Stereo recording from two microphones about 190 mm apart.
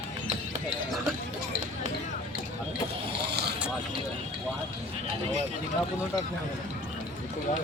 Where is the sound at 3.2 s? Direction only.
60° right (ahead or behind).